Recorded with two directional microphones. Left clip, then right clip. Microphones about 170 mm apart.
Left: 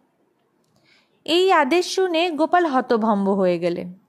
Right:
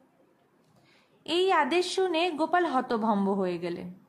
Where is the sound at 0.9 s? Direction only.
40° left (ahead or behind).